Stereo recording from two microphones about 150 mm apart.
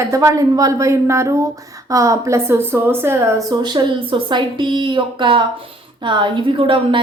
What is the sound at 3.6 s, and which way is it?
A woman's voice, 30° right (ahead or behind).